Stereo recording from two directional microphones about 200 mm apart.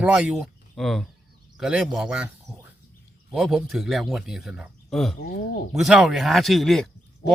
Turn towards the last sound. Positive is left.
turn(degrees=0)  # may be behind; listen again after turning